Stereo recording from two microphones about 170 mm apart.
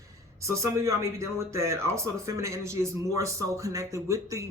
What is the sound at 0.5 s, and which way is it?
A man's voice, 15° right (ahead or behind).